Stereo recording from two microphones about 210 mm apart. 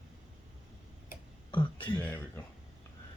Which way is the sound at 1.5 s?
20° left (ahead or behind).